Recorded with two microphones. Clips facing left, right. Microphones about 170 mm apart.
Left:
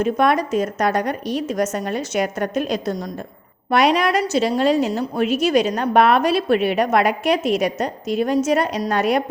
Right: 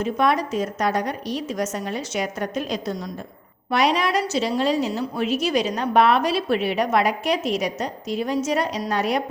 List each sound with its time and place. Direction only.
0.0 s a woman's voice: 55° left (ahead or behind)